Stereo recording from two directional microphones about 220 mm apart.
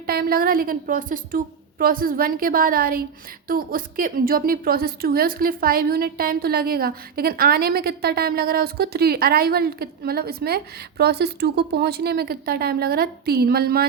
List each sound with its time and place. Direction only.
0.0 s a woman's voice: 45° right (ahead or behind)